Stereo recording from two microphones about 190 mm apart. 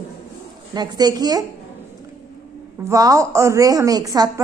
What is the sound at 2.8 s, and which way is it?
A woman's voice, 15° right (ahead or behind).